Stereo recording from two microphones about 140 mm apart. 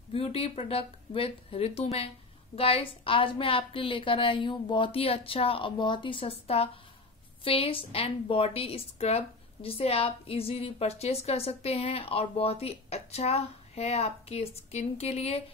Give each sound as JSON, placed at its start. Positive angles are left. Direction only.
{"t": 0.1, "sound": "a woman's voice", "side_deg": 45}